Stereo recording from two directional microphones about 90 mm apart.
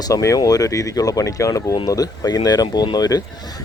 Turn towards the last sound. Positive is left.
turn(degrees=45)  # may be behind; listen again after turning